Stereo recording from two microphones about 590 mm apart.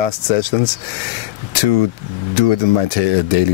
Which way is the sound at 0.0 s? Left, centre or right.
Left.